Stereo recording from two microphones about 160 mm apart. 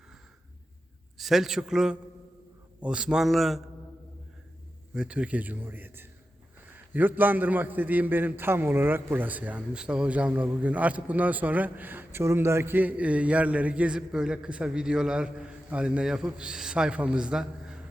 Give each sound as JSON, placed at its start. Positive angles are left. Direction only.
{"t": 1.2, "sound": "a man's voice", "side_deg": 0}
{"t": 4.9, "sound": "a man's voice", "side_deg": -5}